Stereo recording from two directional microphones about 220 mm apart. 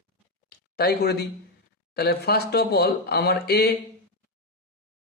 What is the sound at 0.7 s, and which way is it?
Speech, 45° left (ahead or behind).